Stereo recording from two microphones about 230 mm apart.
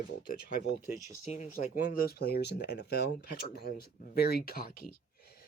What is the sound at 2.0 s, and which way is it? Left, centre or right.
Speech, left.